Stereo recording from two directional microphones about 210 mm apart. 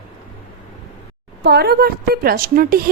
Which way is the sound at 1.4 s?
50° right (ahead or behind).